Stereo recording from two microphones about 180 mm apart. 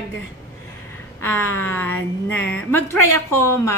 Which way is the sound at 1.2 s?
10° left (ahead or behind).